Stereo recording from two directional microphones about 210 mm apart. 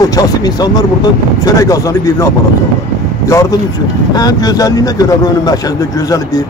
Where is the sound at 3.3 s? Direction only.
15° left (ahead or behind).